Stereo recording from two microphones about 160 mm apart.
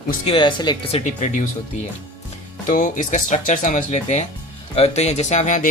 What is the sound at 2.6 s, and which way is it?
Speech, 50° left (ahead or behind).